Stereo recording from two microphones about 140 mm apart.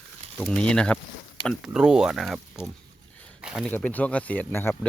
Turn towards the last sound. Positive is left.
turn(degrees=15)  # may be behind; listen again after turning